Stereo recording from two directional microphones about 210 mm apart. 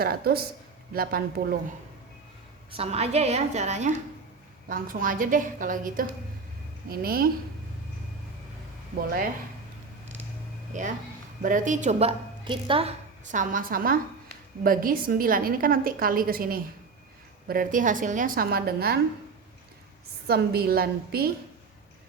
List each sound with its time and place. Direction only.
0.0 s a woman's voice: 45° right (ahead or behind)
2.7 s a woman's voice: 30° right (ahead or behind); by 7.3 s 45° right (ahead or behind)
9.0 s a woman's voice: 45° right (ahead or behind)
10.7 s a woman's voice: 35° right (ahead or behind)
20.2 s a woman's voice: 50° right (ahead or behind)